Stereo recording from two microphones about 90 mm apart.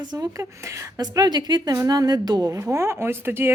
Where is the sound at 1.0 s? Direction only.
50° right (ahead or behind); by 3.5 s 25° right (ahead or behind).